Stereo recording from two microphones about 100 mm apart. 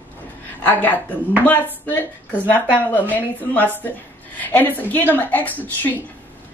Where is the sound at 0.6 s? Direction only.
15° left (ahead or behind).